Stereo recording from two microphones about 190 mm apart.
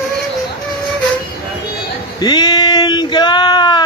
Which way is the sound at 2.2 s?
20° left (ahead or behind).